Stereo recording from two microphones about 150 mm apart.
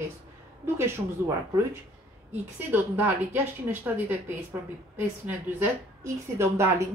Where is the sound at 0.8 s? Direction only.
15° right (ahead or behind).